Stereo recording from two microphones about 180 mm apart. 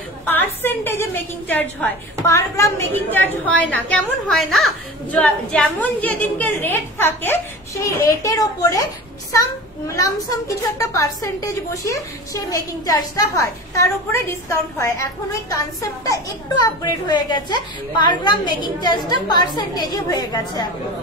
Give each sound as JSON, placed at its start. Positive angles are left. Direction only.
{"t": 0.2, "sound": "a woman's voice", "side_deg": 10}